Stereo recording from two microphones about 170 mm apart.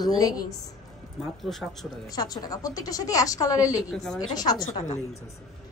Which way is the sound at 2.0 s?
25° left (ahead or behind).